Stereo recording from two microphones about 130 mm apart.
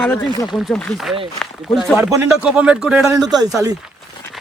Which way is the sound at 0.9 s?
25° right (ahead or behind).